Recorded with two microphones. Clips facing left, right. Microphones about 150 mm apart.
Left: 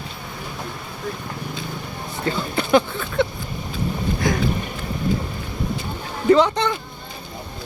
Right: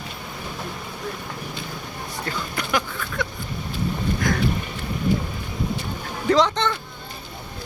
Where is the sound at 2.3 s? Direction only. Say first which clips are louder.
Left 9 dB; 30° left (ahead or behind).